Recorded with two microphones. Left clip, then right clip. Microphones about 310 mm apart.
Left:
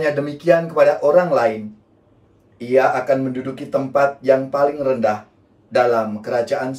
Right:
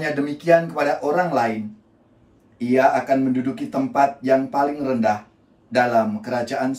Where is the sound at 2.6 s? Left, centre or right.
Centre.